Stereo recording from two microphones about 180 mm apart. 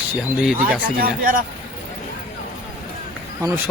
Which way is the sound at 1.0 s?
55° right (ahead or behind).